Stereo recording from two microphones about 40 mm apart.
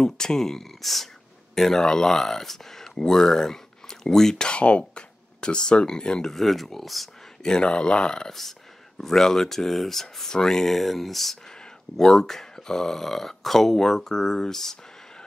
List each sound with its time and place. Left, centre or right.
0.0 s speech: centre
4.5 s speech: left
6.3 s speech: centre
7.4 s speech: left
8.3 s speech: centre